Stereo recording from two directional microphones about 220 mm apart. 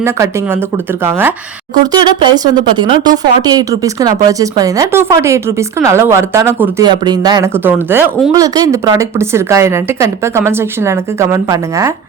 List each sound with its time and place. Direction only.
1.8 s speech: 20° right (ahead or behind)